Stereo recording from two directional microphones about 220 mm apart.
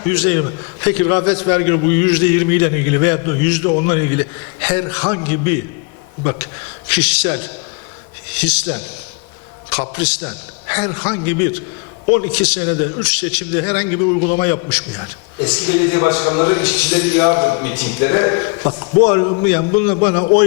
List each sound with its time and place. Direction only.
0.1 s a man's voice: 15° left (ahead or behind)